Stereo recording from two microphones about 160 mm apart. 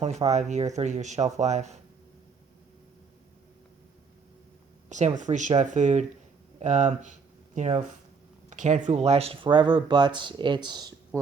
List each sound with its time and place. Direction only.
0.0 s speech: 45° right (ahead or behind)
4.9 s speech: 50° right (ahead or behind); by 11.2 s 25° right (ahead or behind)